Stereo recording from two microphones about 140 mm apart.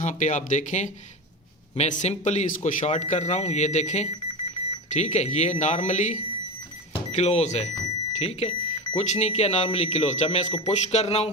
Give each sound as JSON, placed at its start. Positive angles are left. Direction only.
{"t": 0.0, "sound": "speech", "side_deg": 60}